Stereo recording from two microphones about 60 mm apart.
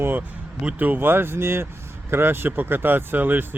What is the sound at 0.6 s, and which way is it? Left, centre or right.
Speech, right.